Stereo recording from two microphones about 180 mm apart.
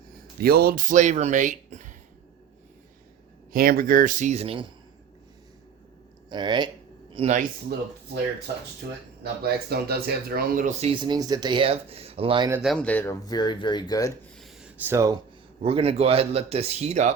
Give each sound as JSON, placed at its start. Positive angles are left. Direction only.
{"t": 0.3, "sound": "speech", "side_deg": -55}
{"t": 3.5, "sound": "speech", "side_deg": -55}
{"t": 6.3, "sound": "a man's voice", "side_deg": -25}
{"t": 9.4, "sound": "speech", "side_deg": -60}
{"t": 12.6, "sound": "speech", "side_deg": 5}
{"t": 13.2, "sound": "speech", "side_deg": 25}
{"t": 14.3, "sound": "gasp", "side_deg": 0}
{"t": 15.6, "sound": "speech", "side_deg": -35}